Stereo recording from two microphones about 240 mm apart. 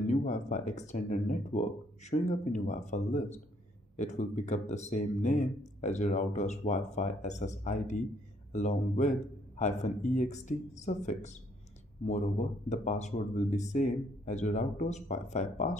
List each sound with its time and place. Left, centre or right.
0.0 s speech: left